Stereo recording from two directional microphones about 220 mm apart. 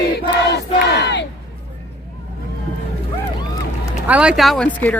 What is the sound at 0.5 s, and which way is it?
Crowd, 50° left (ahead or behind).